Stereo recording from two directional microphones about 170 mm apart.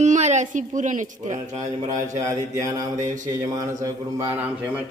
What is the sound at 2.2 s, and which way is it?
A man's voice, 20° right (ahead or behind).